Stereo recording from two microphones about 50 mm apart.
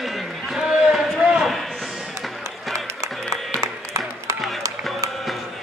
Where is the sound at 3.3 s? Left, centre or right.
Centre.